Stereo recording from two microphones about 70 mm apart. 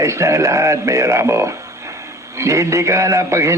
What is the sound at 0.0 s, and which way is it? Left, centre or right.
Speech, right.